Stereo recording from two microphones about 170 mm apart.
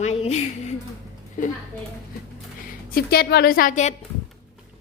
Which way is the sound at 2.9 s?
65° left (ahead or behind).